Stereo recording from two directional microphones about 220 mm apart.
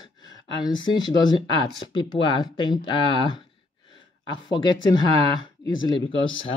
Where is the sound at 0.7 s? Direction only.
20° left (ahead or behind).